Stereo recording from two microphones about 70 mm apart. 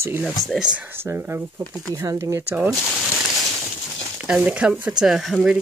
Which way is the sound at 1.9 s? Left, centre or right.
Right.